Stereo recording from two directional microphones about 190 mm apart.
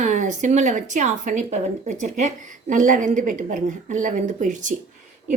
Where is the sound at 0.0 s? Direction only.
40° right (ahead or behind).